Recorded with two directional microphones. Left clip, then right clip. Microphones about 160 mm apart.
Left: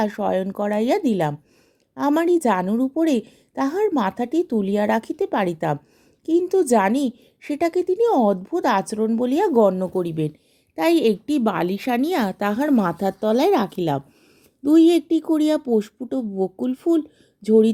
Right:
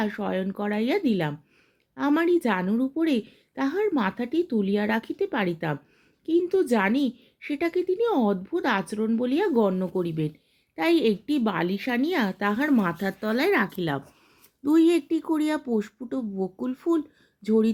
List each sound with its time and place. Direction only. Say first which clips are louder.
0.0 s a woman's voice: left 7 dB; 40° left (ahead or behind)